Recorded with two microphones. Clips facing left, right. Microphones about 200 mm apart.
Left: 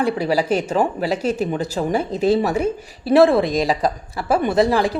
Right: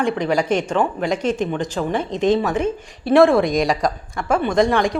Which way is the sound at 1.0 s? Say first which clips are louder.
Even; 5° left (ahead or behind).